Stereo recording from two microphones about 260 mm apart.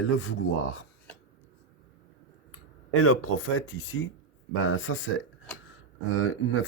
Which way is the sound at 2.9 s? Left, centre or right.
Left.